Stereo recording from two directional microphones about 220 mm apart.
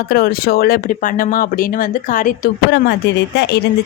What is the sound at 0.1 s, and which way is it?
A woman's voice, 45° left (ahead or behind).